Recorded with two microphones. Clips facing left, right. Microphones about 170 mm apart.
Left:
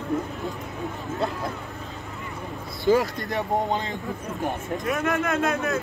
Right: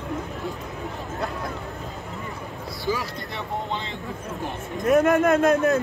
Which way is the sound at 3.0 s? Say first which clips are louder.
Left 7 dB; 45° left (ahead or behind).